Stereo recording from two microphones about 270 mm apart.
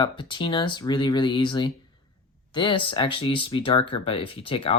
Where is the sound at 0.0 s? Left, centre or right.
Centre.